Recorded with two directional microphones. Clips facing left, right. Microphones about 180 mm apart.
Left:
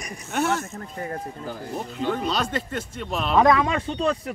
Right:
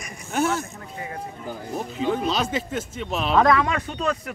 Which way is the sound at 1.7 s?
5° right (ahead or behind).